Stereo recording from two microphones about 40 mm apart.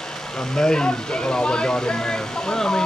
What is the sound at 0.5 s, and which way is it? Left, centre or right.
Speech, centre.